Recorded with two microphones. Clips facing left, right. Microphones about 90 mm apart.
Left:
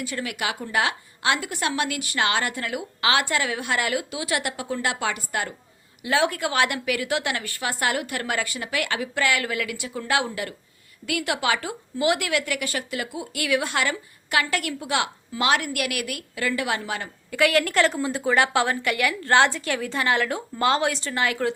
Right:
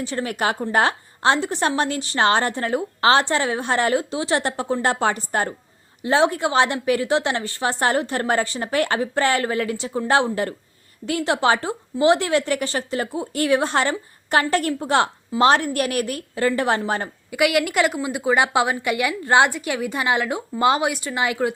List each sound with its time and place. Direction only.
0.0 s a woman's voice: 35° right (ahead or behind)
17.3 s a woman's voice: 15° right (ahead or behind)